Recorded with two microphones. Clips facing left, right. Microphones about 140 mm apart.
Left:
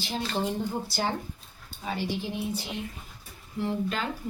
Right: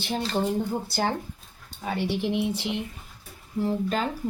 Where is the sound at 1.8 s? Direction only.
60° right (ahead or behind); by 2.8 s 80° right.